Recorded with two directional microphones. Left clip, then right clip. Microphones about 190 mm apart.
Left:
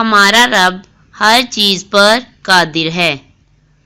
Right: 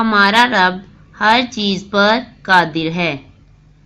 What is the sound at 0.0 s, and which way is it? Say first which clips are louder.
Speech: left 3 dB; 30° left (ahead or behind).